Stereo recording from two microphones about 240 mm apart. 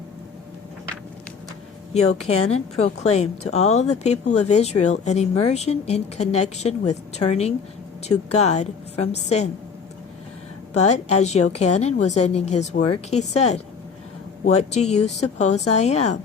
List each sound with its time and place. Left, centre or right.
2.3 s speech: left
10.8 s speech: left